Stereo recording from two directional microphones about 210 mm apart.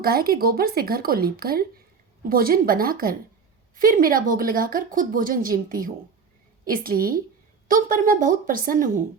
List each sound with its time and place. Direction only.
0.0 s a woman's voice: 45° right (ahead or behind)